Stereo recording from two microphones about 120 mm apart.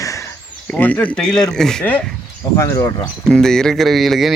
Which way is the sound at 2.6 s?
30° left (ahead or behind).